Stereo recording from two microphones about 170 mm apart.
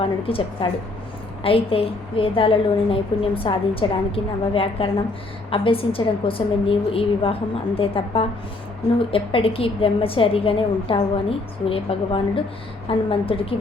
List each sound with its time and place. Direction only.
0.0 s a woman's voice: 35° left (ahead or behind)